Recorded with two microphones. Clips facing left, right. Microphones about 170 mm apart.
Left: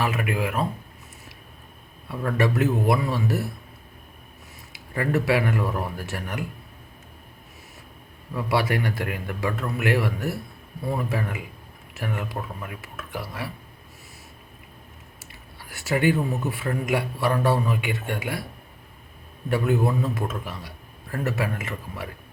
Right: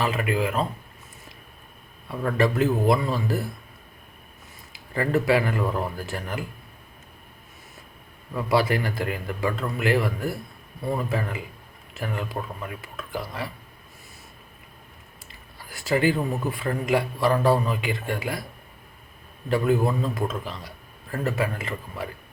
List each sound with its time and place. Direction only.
0.0 s a man's voice: 5° left (ahead or behind)
2.0 s a man's voice: centre (ahead or behind)
4.9 s a man's voice: 5° left (ahead or behind)
8.3 s a man's voice: centre (ahead or behind)
15.7 s a man's voice: centre (ahead or behind)
19.5 s a man's voice: centre (ahead or behind)